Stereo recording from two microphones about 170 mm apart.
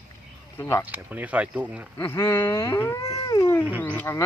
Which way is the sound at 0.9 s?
10° right (ahead or behind).